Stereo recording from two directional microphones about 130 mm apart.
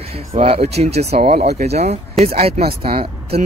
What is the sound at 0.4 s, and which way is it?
Speech, 50° right (ahead or behind).